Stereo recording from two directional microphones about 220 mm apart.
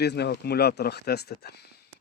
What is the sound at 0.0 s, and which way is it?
Speech, 50° left (ahead or behind).